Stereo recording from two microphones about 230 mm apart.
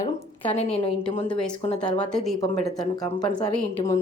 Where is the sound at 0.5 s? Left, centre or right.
Left.